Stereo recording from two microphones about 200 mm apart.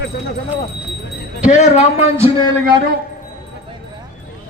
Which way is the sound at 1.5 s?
35° left (ahead or behind).